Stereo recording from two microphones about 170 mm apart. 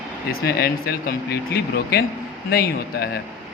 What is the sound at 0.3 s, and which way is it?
Speech, 65° left (ahead or behind).